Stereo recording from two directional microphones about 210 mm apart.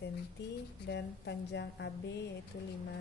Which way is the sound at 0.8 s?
55° left (ahead or behind).